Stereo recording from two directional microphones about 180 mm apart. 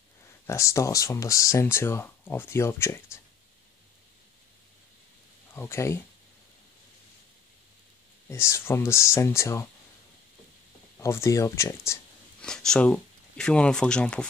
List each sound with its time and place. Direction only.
0.5 s speech: 15° left (ahead or behind)
5.5 s speech: 15° left (ahead or behind)
8.3 s speech: 15° left (ahead or behind)
11.0 s speech: 15° left (ahead or behind)
12.4 s speech: 5° left (ahead or behind)